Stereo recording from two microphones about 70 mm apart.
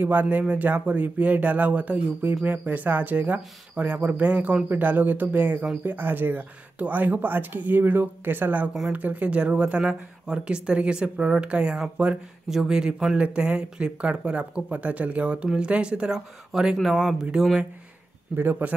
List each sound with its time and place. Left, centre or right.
0.0 s speech: right
16.7 s speech: centre
18.3 s speech: right